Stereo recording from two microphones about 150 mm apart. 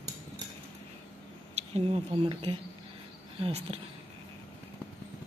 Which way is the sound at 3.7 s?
40° right (ahead or behind).